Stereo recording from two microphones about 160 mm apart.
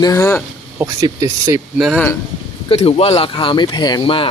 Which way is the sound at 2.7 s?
40° left (ahead or behind).